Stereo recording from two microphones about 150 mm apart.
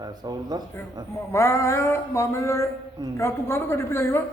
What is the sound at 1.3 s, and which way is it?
Speech, 20° left (ahead or behind).